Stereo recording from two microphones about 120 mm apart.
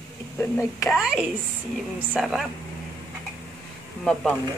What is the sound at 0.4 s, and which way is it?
Speech, 25° left (ahead or behind).